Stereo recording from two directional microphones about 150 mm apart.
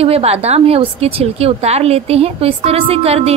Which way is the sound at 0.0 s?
40° right (ahead or behind).